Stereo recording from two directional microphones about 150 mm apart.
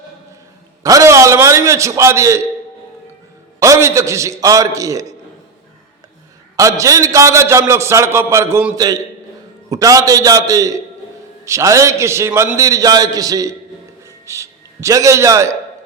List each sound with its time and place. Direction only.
0.8 s a sound: 20° right (ahead or behind)
3.6 s a man's voice: 20° right (ahead or behind)
6.6 s a man's voice: 20° right (ahead or behind)